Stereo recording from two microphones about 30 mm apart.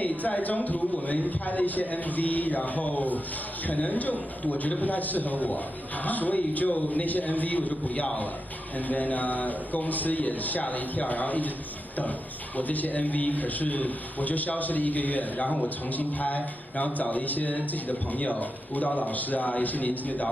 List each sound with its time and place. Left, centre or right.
0.4 s a man's voice: left
8.8 s a man's voice: left
12.5 s a man's voice: left
16.0 s a man's voice: left
18.2 s a man's voice: left